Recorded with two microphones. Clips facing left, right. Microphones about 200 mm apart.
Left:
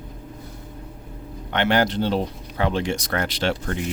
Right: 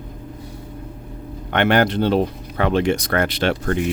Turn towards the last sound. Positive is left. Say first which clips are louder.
# right 4 dB
turn(degrees=-60)  # may be behind; listen again after turning